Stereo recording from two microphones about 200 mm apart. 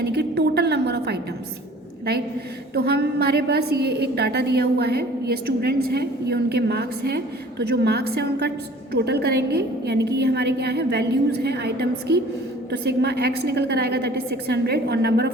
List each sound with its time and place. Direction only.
0.0 s a woman's voice: 55° right (ahead or behind)
2.7 s a woman's voice: 55° right (ahead or behind)